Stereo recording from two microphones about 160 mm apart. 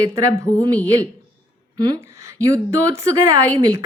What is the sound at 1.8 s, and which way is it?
A woman's voice, 20° right (ahead or behind).